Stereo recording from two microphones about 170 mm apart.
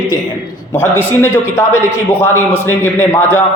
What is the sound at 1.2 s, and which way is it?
A man's voice, 15° left (ahead or behind).